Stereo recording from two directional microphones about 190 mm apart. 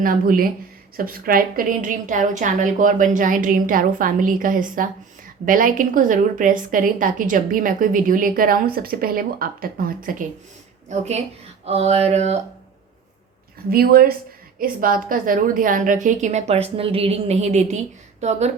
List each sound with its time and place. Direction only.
0.0 s a woman's voice: 45° right (ahead or behind)
10.8 s a woman's voice: 35° right (ahead or behind)
13.7 s a woman's voice: 50° right (ahead or behind)